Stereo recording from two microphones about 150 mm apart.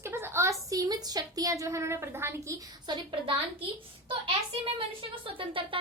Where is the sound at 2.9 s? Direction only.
35° right (ahead or behind).